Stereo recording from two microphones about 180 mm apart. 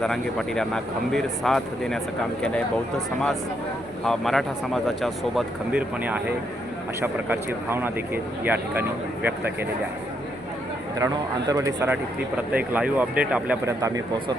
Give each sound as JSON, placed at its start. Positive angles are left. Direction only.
{"t": 0.0, "sound": "speech", "side_deg": 5}
{"t": 4.0, "sound": "speech", "side_deg": 0}
{"t": 10.9, "sound": "speech", "side_deg": -20}
{"t": 13.8, "sound": "speech", "side_deg": -20}